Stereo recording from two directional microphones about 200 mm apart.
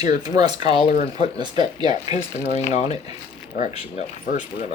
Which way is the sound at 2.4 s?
30° left (ahead or behind).